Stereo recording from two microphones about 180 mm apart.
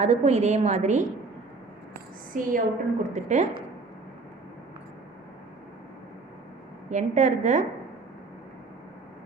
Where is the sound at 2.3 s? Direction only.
50° right (ahead or behind).